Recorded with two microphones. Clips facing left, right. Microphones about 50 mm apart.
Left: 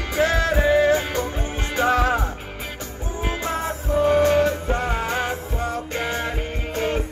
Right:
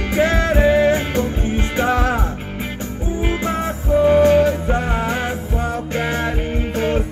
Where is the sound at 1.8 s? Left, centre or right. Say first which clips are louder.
Left 1 dB; centre.